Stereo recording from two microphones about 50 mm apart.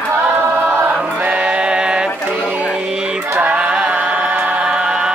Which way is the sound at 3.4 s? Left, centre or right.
Right.